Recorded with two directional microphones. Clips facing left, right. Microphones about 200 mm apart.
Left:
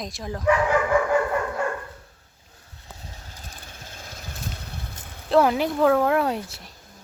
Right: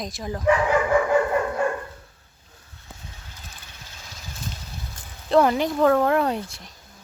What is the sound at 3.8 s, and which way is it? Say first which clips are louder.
Vehicle: left 4 dB; 50° left (ahead or behind).